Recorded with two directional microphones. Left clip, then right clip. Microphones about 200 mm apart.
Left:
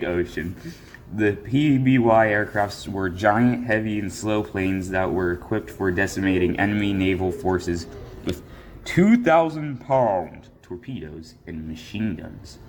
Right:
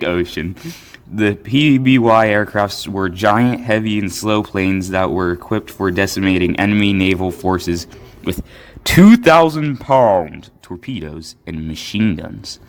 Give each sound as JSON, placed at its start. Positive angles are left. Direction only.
{"t": 0.0, "sound": "a man's voice", "side_deg": -45}